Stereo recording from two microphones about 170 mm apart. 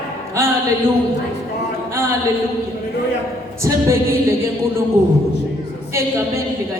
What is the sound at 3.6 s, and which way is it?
Speech, 15° right (ahead or behind).